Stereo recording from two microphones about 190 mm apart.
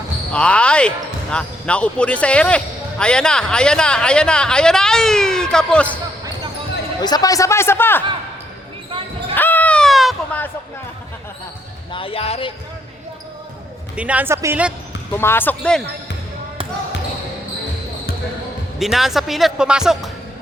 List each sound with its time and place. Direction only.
0.3 s speech: 5° left (ahead or behind)
7.0 s a man's voice: 20° left (ahead or behind)
9.3 s baby cry: 10° left (ahead or behind)
11.9 s speech: 30° left (ahead or behind)
13.9 s speech: 5° right (ahead or behind)
15.1 s a man's voice: 10° left (ahead or behind)
18.8 s speech: centre (ahead or behind)